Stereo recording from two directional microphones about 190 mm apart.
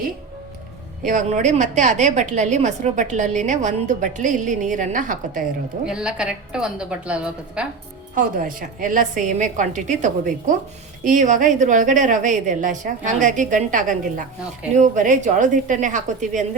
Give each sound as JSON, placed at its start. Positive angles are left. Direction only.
{"t": 1.0, "sound": "a woman's voice", "side_deg": -40}
{"t": 5.8, "sound": "a woman's voice", "side_deg": -5}
{"t": 8.1, "sound": "a woman's voice", "side_deg": -45}